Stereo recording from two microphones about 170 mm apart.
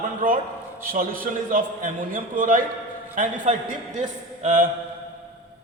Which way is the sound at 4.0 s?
50° right (ahead or behind).